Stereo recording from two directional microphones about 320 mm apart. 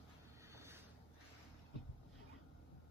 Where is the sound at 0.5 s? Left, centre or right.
Centre.